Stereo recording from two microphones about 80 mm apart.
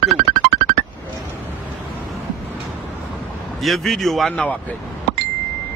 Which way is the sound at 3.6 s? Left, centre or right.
Centre.